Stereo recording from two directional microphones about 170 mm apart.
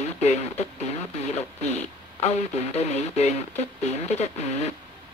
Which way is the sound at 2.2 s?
40° left (ahead or behind).